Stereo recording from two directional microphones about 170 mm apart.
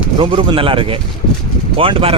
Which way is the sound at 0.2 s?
30° right (ahead or behind).